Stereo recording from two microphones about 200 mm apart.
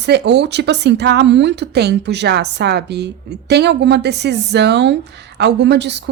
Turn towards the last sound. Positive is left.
turn(degrees=-60)  # may be behind; listen again after turning